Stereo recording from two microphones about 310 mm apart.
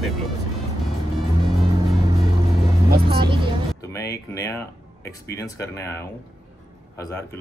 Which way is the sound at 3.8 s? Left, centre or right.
Centre.